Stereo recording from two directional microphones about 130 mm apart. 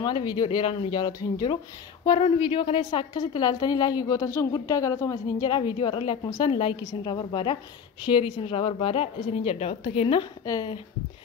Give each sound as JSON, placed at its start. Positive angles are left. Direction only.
{"t": 0.0, "sound": "a woman's voice", "side_deg": 35}
{"t": 2.0, "sound": "a woman's voice", "side_deg": 45}
{"t": 10.4, "sound": "speech", "side_deg": 30}